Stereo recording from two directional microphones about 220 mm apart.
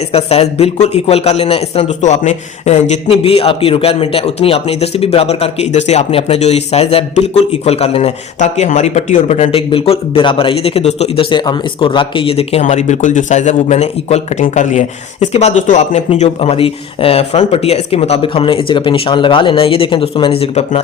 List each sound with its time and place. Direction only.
0.1 s a man's voice: 25° left (ahead or behind)